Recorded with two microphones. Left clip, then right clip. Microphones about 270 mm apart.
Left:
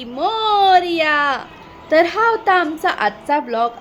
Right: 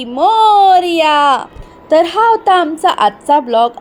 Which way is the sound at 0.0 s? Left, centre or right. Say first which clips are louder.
Right 10 dB; right.